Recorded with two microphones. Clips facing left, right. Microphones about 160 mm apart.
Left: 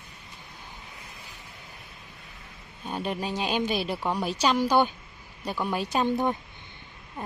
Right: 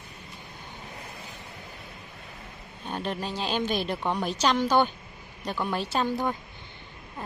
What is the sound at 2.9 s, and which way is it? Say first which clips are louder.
Speech: left 1 dB; 10° left (ahead or behind).